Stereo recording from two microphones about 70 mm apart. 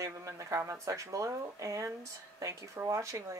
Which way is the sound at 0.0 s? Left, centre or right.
Right.